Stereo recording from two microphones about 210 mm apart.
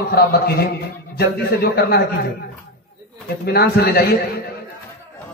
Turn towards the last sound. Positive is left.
turn(degrees=50)  # may be behind; listen again after turning